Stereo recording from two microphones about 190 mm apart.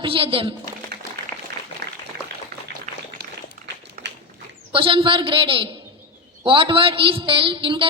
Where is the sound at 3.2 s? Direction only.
60° right (ahead or behind).